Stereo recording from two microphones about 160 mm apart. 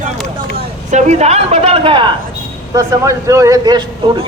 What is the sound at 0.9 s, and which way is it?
A woman's voice, 45° right (ahead or behind).